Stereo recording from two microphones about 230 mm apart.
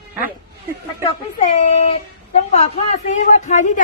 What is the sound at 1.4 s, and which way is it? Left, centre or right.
A woman's voice, left.